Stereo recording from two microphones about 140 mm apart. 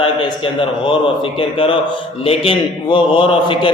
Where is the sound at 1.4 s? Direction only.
40° left (ahead or behind).